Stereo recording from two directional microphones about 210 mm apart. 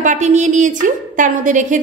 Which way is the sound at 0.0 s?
35° right (ahead or behind).